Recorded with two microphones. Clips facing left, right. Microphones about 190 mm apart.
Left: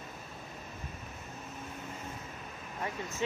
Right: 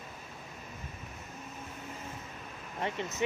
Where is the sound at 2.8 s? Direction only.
25° right (ahead or behind).